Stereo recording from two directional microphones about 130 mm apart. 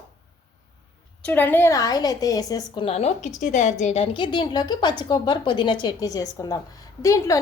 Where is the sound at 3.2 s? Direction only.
70° left (ahead or behind); by 5.7 s 40° left (ahead or behind).